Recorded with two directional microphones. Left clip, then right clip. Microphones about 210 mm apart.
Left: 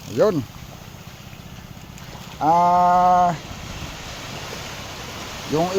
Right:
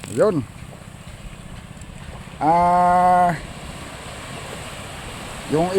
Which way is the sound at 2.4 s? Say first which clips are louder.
Even; 15° right (ahead or behind).